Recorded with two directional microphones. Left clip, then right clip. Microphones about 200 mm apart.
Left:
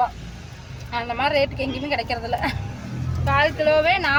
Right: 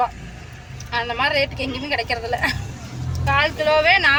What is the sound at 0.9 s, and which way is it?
Speech, 5° left (ahead or behind).